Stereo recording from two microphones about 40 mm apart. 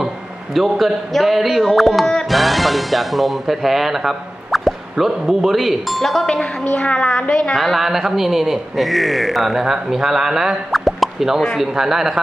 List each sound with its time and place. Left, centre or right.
0.5 s a man's voice: centre
6.2 s a woman's voice: left
7.5 s a man's voice: centre
7.9 s speech: centre
10.7 s plop: centre
11.7 s speech: centre